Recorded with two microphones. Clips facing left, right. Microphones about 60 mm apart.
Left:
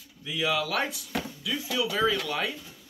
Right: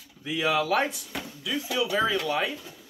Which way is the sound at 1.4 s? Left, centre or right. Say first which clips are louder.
Right 3 dB; centre.